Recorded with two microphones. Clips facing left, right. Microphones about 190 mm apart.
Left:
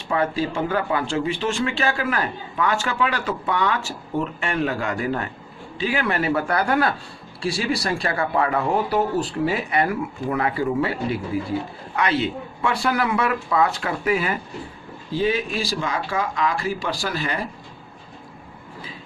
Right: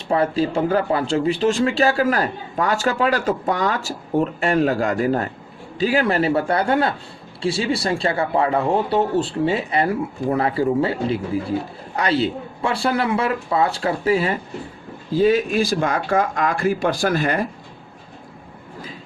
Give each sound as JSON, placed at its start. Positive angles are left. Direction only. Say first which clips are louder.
{"t": 0.1, "sound": "a man's voice", "louder": "right 4 dB", "side_deg": -35}
{"t": 15.1, "sound": "speech", "louder": "right 6 dB", "side_deg": -40}